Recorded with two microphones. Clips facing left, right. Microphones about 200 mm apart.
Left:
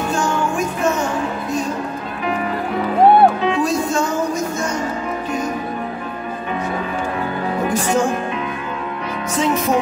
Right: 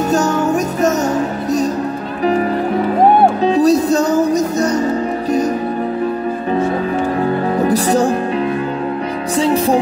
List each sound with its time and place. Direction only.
0.1 s music: 40° right (ahead or behind)
3.4 s music: 35° right (ahead or behind)
7.5 s music: 35° right (ahead or behind)
9.4 s music: 30° right (ahead or behind)